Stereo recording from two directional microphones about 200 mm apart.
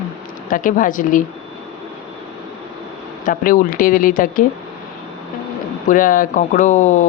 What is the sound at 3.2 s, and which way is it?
Speech, 40° left (ahead or behind).